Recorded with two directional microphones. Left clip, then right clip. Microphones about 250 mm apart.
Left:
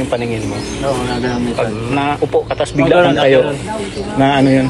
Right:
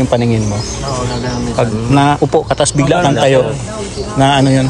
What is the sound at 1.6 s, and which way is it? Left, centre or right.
Speech, centre.